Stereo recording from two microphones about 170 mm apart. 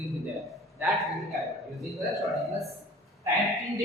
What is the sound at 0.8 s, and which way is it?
A woman's voice, centre (ahead or behind).